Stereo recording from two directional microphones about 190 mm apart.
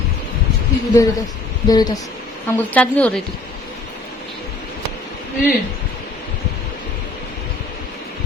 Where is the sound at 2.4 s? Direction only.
10° left (ahead or behind).